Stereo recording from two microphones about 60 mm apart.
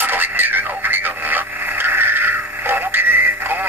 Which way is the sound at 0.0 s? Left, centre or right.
Right.